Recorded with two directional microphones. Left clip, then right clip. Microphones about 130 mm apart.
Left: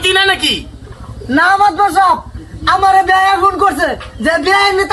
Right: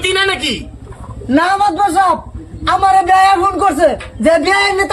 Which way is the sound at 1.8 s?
15° right (ahead or behind).